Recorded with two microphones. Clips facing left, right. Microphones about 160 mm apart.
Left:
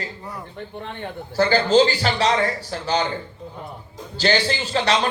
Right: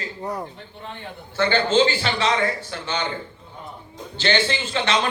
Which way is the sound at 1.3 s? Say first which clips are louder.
Left 3 dB; 35° left (ahead or behind).